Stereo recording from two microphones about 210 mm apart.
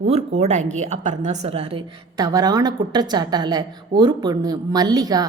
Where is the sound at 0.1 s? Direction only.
30° right (ahead or behind).